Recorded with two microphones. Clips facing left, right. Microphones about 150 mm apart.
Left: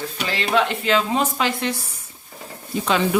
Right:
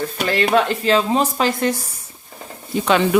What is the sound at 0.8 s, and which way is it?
Speech, 35° right (ahead or behind).